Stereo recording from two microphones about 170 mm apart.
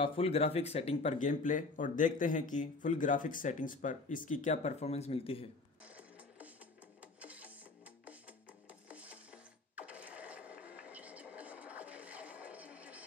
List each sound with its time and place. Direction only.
0.0 s speech: 35° left (ahead or behind)
5.9 s music: 10° right (ahead or behind)
8.8 s a sound: 10° right (ahead or behind)